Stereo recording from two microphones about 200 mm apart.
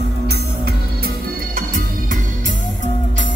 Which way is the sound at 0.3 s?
50° right (ahead or behind).